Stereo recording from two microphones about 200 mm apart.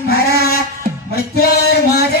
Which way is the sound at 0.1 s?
50° left (ahead or behind).